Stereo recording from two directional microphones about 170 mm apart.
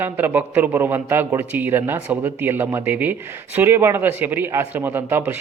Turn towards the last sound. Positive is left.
turn(degrees=-10)  # may be behind; listen again after turning